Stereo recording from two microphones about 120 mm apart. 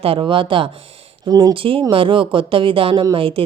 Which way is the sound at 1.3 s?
30° right (ahead or behind).